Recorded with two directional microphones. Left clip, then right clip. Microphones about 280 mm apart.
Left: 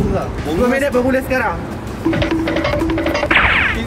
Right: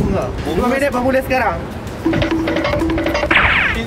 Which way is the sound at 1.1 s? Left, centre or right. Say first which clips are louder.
Right 1 dB; right.